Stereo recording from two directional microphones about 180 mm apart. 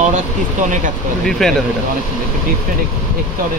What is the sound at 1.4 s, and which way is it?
Speech, centre (ahead or behind).